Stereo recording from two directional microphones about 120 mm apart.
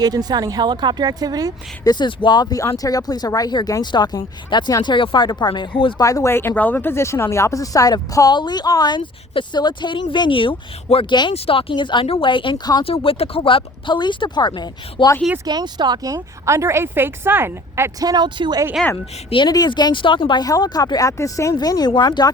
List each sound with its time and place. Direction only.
0.0 s speech: 35° right (ahead or behind)
1.8 s speech: 35° left (ahead or behind)
6.0 s speech: 25° left (ahead or behind)
9.0 s speech: 45° left (ahead or behind)
12.8 s speech: 50° left (ahead or behind)
15.4 s a woman's voice: 35° right (ahead or behind)
18.1 s speech: 35° right (ahead or behind)
19.3 s speech: 40° left (ahead or behind)